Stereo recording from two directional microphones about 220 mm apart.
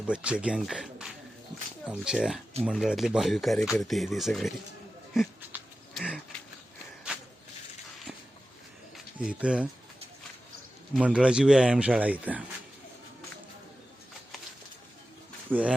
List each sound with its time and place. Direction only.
0.1 s speech: 5° right (ahead or behind)
5.1 s a sound: 5° right (ahead or behind)
8.1 s a sound: 5° right (ahead or behind)
9.1 s speech: 5° right (ahead or behind)
10.9 s speech: 5° right (ahead or behind)
15.4 s speech: 5° right (ahead or behind)